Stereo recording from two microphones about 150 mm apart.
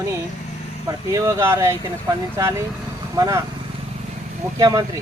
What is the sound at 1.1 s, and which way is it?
A man's voice, 20° right (ahead or behind).